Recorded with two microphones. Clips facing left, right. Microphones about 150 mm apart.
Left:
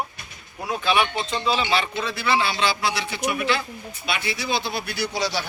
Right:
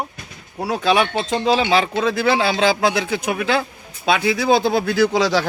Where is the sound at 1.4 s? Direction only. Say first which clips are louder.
Right 6 dB; 75° right (ahead or behind).